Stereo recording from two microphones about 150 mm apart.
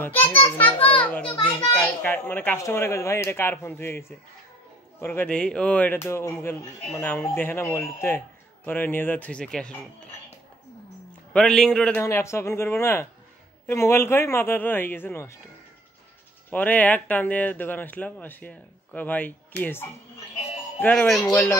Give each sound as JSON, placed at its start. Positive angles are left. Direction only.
{"t": 0.0, "sound": "speech", "side_deg": 15}
{"t": 0.8, "sound": "children playing", "side_deg": 10}
{"t": 1.4, "sound": "a child's voice", "side_deg": 10}
{"t": 11.3, "sound": "a man's voice", "side_deg": 5}
{"t": 12.0, "sound": "speech", "side_deg": 20}
{"t": 16.4, "sound": "a man's voice", "side_deg": 10}